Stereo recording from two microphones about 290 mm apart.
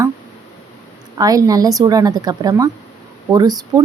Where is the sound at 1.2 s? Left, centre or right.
Centre.